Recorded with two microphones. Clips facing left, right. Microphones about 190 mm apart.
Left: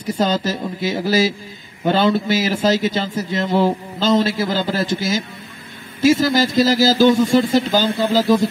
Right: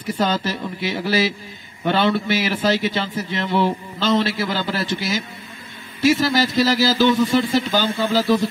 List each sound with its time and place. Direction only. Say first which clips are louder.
0.0 s a man's voice: left 2 dB; 45° left (ahead or behind)